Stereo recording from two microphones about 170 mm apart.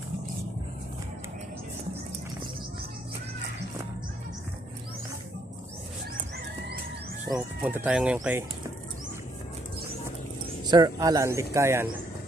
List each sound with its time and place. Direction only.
7.3 s speech: 10° right (ahead or behind)
10.7 s speech: 20° right (ahead or behind)